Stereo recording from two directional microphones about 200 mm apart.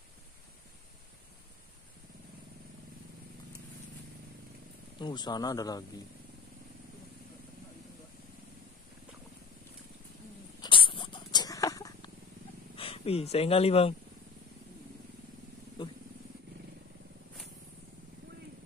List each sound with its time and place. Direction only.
5.0 s speech: 20° left (ahead or behind)
10.6 s a sound: 25° left (ahead or behind)
12.7 s speech: 30° left (ahead or behind)